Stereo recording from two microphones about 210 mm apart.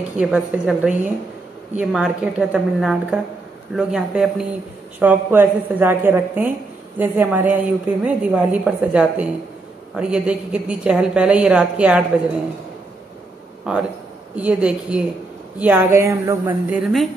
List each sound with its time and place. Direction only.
0.2 s a woman's voice: 5° right (ahead or behind)
13.7 s a woman's voice: 5° right (ahead or behind)